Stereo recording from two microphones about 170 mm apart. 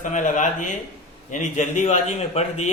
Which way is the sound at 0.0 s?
45° left (ahead or behind).